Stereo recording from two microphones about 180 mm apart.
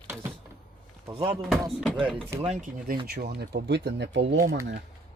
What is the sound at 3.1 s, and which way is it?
Speech, 65° right (ahead or behind).